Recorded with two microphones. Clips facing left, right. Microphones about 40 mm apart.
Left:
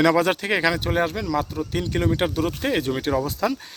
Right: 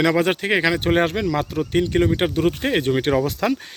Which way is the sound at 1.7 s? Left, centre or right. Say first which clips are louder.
Right 8 dB; right.